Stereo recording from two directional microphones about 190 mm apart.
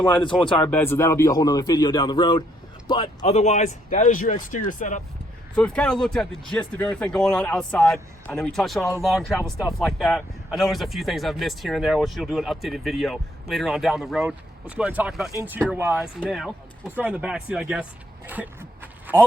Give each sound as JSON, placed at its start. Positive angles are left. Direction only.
{"t": 0.5, "sound": "a man's voice", "side_deg": 10}
{"t": 5.5, "sound": "speech", "side_deg": 5}
{"t": 18.3, "sound": "a sound", "side_deg": -10}